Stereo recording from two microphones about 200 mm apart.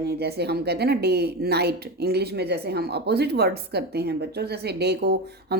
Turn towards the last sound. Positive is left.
turn(degrees=-55)  # may be behind; listen again after turning